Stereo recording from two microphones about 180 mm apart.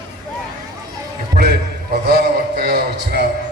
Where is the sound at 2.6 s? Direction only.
60° right (ahead or behind).